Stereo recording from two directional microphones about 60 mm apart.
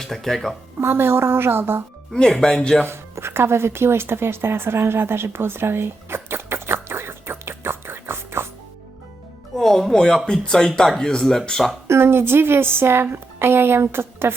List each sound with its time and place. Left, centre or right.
0.0 s speech: centre
0.8 s a woman's voice: right
2.3 s speech: centre
2.8 s a sound: right
9.6 s music: centre
10.2 s speech: centre
11.9 s a woman's voice: right